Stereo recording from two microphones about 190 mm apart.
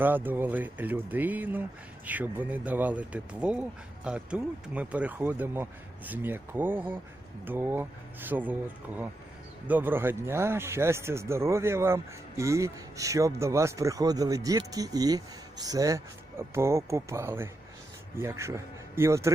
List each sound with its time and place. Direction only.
0.0 s speech: 10° right (ahead or behind)
9.6 s speech: 10° right (ahead or behind)